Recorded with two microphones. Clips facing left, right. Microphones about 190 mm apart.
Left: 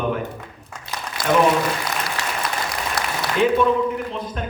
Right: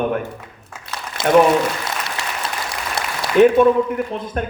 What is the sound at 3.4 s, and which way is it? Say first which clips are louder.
A man's voice: right 6 dB; 60° right (ahead or behind).